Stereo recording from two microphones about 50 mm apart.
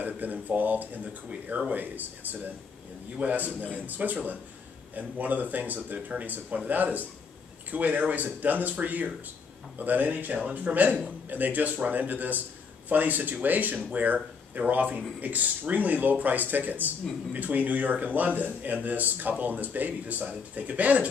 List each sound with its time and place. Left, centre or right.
0.0 s speech: right